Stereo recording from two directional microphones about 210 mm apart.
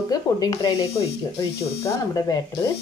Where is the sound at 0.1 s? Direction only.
20° left (ahead or behind).